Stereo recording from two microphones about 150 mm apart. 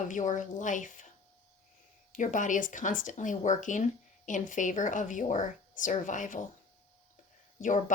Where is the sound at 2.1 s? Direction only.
60° left (ahead or behind).